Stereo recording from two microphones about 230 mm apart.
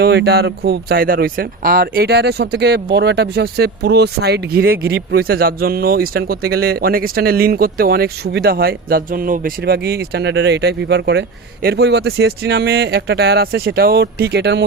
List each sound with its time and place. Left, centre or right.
0.0 s speech: right